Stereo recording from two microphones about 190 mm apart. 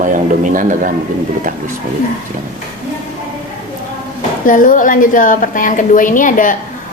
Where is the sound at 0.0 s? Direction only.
45° right (ahead or behind).